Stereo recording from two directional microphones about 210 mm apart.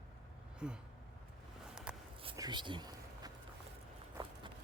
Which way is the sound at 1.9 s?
5° right (ahead or behind).